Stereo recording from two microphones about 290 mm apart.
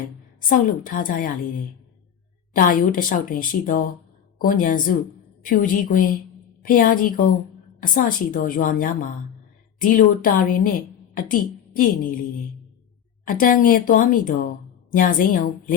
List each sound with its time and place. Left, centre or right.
0.3 s a woman's voice: left
2.6 s a woman's voice: left
13.2 s a woman's voice: left